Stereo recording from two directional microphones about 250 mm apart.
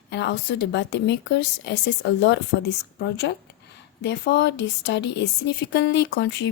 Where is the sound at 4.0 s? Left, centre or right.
Left.